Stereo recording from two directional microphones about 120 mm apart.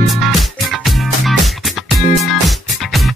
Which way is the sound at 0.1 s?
Centre (ahead or behind).